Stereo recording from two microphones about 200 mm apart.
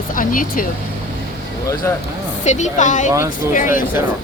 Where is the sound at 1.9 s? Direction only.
15° left (ahead or behind).